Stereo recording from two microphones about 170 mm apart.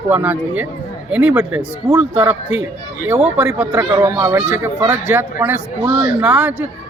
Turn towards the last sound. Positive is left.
turn(degrees=-10)  # may be behind; listen again after turning